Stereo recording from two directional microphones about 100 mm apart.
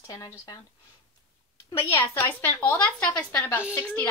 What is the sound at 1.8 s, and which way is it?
A woman's voice, 25° left (ahead or behind).